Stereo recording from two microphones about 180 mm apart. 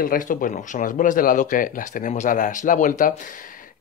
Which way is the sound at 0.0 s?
50° left (ahead or behind).